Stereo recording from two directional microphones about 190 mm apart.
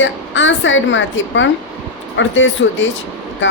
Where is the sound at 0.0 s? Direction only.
80° left.